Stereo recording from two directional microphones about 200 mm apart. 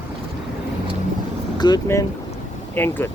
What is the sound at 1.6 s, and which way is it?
Speech, 20° left (ahead or behind).